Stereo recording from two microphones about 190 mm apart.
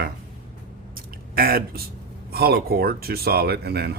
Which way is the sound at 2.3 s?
55° right (ahead or behind).